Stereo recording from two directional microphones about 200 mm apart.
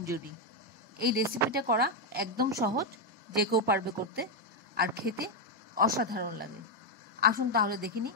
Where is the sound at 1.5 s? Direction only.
50° right (ahead or behind).